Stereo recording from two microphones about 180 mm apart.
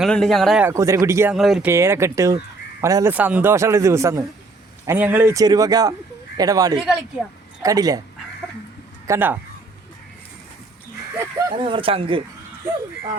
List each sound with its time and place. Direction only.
0.0 s speech: centre (ahead or behind)
0.6 s a man's voice: 15° right (ahead or behind)
1.3 s speech: 5° right (ahead or behind)
1.7 s a man's voice: 15° right (ahead or behind)
9.0 s a man's voice: 10° right (ahead or behind)
11.2 s speech: 20° right (ahead or behind)